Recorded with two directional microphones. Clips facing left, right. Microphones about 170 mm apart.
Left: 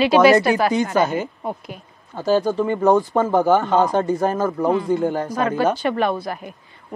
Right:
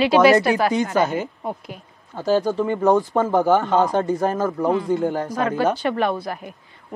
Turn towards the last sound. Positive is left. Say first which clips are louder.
# left 1 dB
turn(degrees=20)  # may be behind; listen again after turning